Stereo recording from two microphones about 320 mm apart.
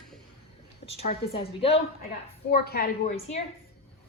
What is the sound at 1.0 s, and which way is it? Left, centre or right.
A woman's voice, centre.